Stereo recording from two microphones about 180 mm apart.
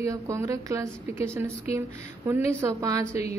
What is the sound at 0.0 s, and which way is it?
A woman's voice, 15° right (ahead or behind).